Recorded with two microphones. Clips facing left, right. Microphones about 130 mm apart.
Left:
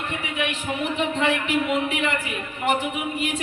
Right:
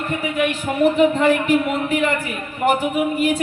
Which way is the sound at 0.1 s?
45° right (ahead or behind).